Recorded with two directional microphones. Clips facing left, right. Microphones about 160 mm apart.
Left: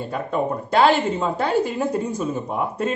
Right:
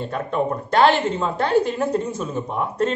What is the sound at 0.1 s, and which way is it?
A man's voice, 10° left (ahead or behind).